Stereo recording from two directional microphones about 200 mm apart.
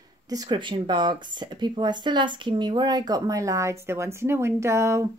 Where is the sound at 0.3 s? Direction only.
20° right (ahead or behind).